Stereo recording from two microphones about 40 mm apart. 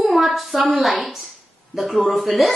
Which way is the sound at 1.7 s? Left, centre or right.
Centre.